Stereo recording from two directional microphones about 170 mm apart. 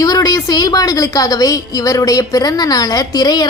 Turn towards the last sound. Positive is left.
turn(degrees=20)  # may be behind; listen again after turning